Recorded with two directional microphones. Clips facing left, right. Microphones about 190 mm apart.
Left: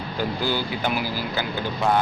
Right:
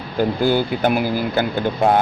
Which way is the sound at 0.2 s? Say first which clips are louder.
Right 8 dB; 50° right (ahead or behind).